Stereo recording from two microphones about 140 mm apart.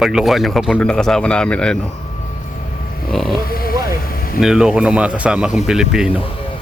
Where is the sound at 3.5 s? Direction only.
90° left.